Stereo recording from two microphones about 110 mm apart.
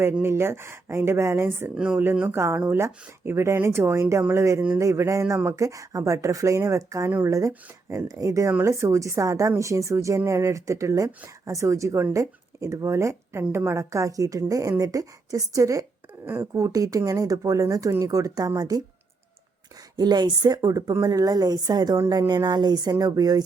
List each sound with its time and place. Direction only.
0.2 s speech: 20° right (ahead or behind)
1.7 s speech: 10° right (ahead or behind)
2.1 s a woman's voice: 20° right (ahead or behind)
20.0 s a woman's voice: 40° right (ahead or behind)